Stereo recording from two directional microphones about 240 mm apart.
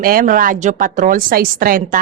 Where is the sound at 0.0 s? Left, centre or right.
Right.